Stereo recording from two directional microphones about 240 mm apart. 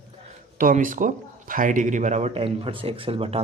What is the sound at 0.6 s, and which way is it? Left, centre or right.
Speech, right.